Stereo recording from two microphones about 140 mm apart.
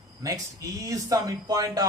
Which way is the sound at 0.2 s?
25° right (ahead or behind).